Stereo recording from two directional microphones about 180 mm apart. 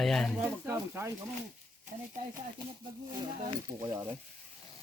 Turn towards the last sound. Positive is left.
turn(degrees=-20)  # may be behind; listen again after turning